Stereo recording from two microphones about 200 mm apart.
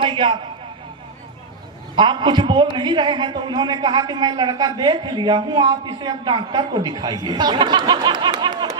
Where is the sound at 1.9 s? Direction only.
20° right (ahead or behind).